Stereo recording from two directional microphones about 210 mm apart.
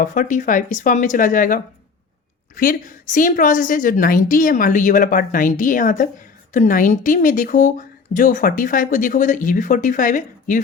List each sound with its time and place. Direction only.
0.0 s speech: 40° left (ahead or behind)